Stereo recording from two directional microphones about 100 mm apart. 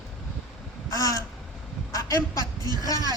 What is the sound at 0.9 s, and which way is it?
A man's voice, 35° left (ahead or behind).